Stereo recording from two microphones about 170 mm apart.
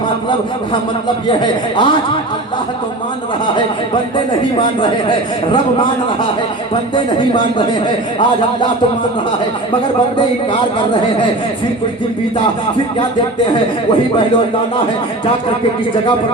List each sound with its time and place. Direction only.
1.3 s speech: 30° left (ahead or behind)
4.5 s a man's voice: 30° left (ahead or behind)
6.9 s speech: 30° left (ahead or behind)